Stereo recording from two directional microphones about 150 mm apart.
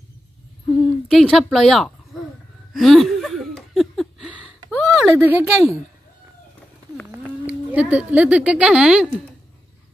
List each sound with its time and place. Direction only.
1.1 s speech: centre (ahead or behind)
2.7 s laughter: centre (ahead or behind)
4.6 s a sound: 5° right (ahead or behind)
5.1 s speech: 15° right (ahead or behind)
7.1 s speech: 10° right (ahead or behind)